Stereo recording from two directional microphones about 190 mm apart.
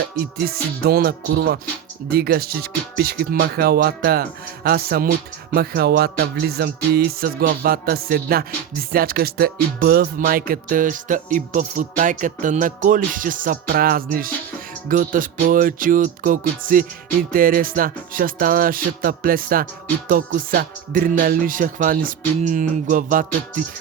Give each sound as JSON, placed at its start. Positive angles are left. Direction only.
{"t": 0.2, "sound": "music", "side_deg": -55}